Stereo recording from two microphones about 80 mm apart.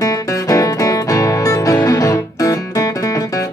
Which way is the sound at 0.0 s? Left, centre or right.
Left.